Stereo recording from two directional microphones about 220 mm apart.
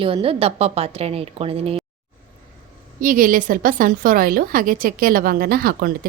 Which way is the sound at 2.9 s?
40° right (ahead or behind).